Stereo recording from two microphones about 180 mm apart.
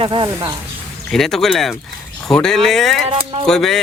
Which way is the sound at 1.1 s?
Centre (ahead or behind).